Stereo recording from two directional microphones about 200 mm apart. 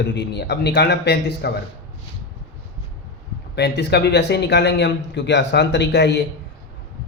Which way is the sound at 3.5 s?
55° left (ahead or behind).